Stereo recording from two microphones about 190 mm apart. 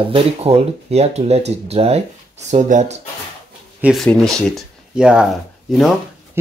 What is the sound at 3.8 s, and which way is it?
Speech, 5° right (ahead or behind).